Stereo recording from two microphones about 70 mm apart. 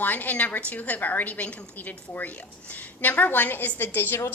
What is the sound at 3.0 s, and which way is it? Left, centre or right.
A woman's voice, left.